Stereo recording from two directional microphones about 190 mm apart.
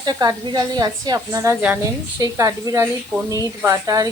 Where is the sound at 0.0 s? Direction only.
20° right (ahead or behind).